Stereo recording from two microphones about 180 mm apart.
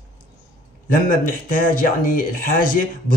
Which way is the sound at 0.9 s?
50° left (ahead or behind).